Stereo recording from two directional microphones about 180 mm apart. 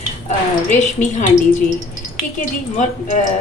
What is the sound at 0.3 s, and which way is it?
Speech, 40° left (ahead or behind).